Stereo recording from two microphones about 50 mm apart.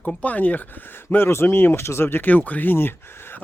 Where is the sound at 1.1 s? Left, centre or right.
Left.